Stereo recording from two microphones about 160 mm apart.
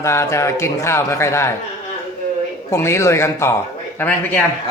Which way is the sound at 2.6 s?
15° left (ahead or behind).